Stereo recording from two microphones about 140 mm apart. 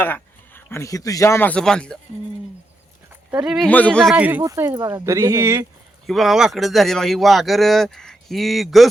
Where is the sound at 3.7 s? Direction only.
10° left (ahead or behind).